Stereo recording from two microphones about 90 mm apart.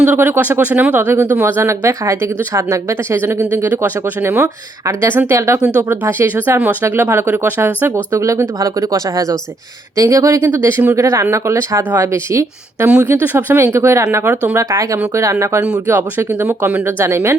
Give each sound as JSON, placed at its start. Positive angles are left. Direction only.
{"t": 0.0, "sound": "speech", "side_deg": -25}
{"t": 3.5, "sound": "speech", "side_deg": -25}
{"t": 8.1, "sound": "speech", "side_deg": -35}
{"t": 10.7, "sound": "speech", "side_deg": -25}
{"t": 13.1, "sound": "speech", "side_deg": -20}
{"t": 15.9, "sound": "speech", "side_deg": -25}
{"t": 16.8, "sound": "speech", "side_deg": -30}